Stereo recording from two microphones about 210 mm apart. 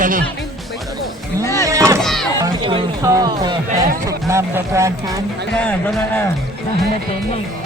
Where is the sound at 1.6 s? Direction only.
15° right (ahead or behind).